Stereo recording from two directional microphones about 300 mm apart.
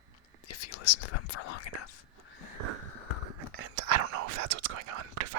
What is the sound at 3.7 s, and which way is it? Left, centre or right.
Whispering, right.